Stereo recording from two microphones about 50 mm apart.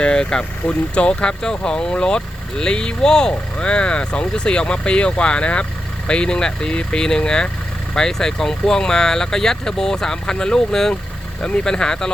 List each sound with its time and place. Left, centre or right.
0.0 s speech: centre